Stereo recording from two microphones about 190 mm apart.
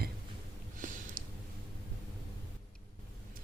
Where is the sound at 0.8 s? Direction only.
45° right (ahead or behind).